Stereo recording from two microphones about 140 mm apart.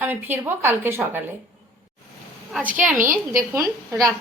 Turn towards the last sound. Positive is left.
turn(degrees=-25)  # may be behind; listen again after turning